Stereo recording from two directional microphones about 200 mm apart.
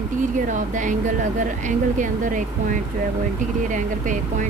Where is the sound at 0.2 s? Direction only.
40° right (ahead or behind).